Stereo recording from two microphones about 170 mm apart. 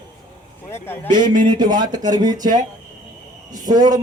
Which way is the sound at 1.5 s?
25° right (ahead or behind).